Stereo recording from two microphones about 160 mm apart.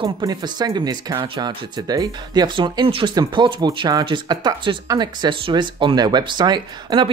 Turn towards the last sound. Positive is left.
turn(degrees=-25)  # may be behind; listen again after turning